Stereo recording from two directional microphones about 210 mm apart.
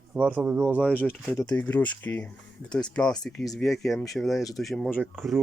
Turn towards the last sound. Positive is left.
turn(degrees=0)  # may be behind; listen again after turning